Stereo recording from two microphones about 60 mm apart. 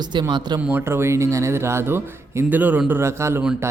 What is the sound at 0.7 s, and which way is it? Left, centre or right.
Speech, right.